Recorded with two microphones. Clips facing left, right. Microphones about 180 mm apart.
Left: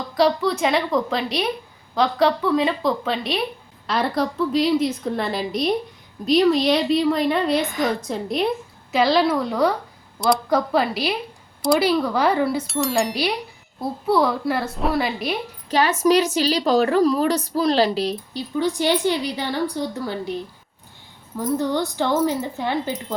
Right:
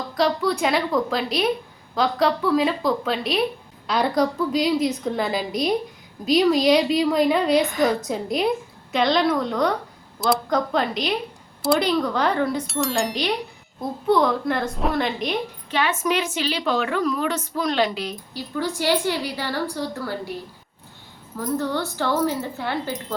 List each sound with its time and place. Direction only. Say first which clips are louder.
0.1 s a woman's voice: left 3 dB; centre (ahead or behind)
15.7 s a woman's voice: left 6 dB; 40° left (ahead or behind)
18.3 s a woman's voice: left 3 dB; 20° left (ahead or behind)
21.3 s a woman's voice: left 3 dB; 15° left (ahead or behind)